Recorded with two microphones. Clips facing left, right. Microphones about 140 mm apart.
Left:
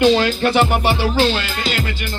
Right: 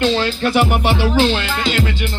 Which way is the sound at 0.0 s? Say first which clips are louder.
Left 3 dB; 10° left (ahead or behind).